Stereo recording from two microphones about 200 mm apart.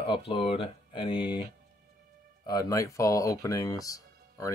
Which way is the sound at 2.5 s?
15° left (ahead or behind).